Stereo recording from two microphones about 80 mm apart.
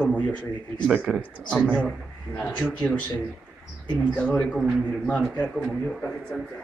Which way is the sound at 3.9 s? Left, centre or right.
Centre.